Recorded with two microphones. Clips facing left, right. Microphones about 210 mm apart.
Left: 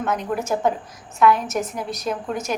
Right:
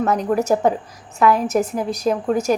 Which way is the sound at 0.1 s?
35° right (ahead or behind).